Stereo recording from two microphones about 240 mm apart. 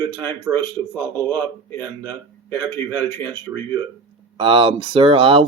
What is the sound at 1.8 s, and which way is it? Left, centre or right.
A man's voice, centre.